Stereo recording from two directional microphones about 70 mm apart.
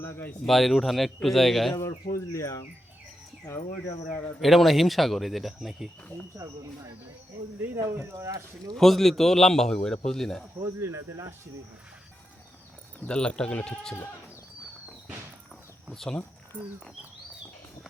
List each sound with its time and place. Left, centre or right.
0.4 s speech: centre
1.7 s speech: left
4.4 s speech: centre
6.3 s speech: right
8.1 s speech: right
8.7 s a man's voice: centre
10.6 s speech: right
13.1 s a man's voice: centre
15.9 s speech: centre